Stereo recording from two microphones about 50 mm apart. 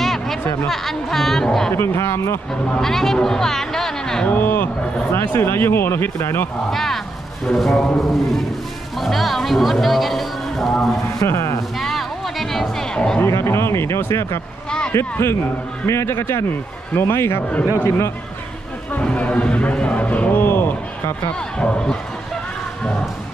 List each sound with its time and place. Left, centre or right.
0.0 s music: centre
0.7 s speech: centre
1.7 s speech: left
2.8 s speech: centre
4.3 s speech: left
5.3 s speech: left
6.7 s speech: centre
11.0 s a man's voice: left
11.8 s music: centre
12.9 s speech: centre
13.3 s a man's voice: left
19.0 s speech: left
20.3 s a sound: left
21.5 s speech: centre